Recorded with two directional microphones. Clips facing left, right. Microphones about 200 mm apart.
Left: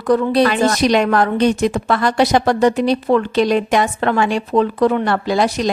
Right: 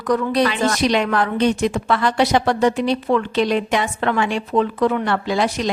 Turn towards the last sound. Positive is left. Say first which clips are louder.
# left 3 dB
turn(degrees=35)  # may be behind; listen again after turning